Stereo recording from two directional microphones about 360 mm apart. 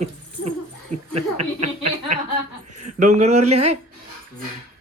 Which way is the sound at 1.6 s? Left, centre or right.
Centre.